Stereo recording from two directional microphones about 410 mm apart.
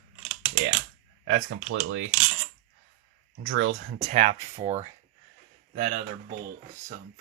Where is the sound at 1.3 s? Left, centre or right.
Right.